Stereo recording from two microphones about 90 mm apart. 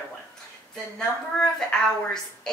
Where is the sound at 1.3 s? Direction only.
5° left (ahead or behind).